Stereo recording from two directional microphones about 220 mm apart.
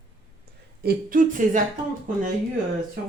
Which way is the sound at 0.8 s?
40° right (ahead or behind).